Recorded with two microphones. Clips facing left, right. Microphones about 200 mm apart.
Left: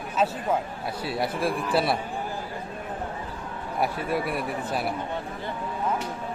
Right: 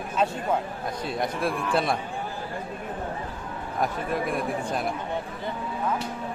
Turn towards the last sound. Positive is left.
turn(degrees=5)  # may be behind; listen again after turning